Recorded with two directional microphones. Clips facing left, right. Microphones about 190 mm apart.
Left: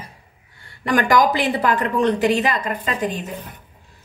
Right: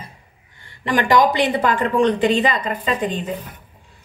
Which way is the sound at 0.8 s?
20° right (ahead or behind).